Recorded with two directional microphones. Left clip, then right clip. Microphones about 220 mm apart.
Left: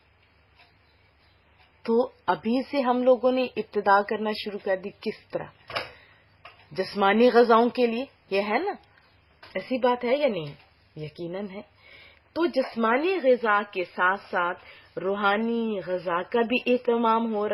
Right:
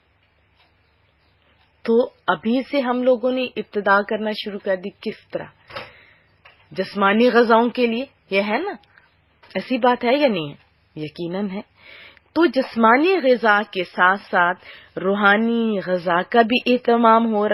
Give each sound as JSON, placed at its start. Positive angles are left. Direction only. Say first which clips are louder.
{"t": 1.8, "sound": "a woman's voice", "louder": "right 6 dB", "side_deg": -10}
{"t": 6.7, "sound": "a woman's voice", "louder": "right 4 dB", "side_deg": -10}